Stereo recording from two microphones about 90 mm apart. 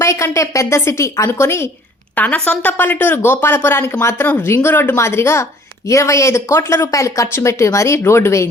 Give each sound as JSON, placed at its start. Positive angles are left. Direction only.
{"t": 0.0, "sound": "speech", "side_deg": 35}
{"t": 2.1, "sound": "speech", "side_deg": 15}